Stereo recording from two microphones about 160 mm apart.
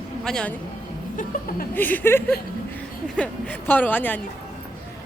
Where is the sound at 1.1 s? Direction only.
55° left (ahead or behind).